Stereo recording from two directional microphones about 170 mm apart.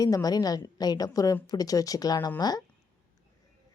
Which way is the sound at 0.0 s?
20° left (ahead or behind).